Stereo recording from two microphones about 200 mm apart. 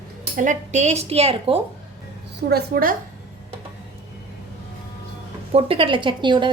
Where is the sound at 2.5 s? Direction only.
50° right (ahead or behind).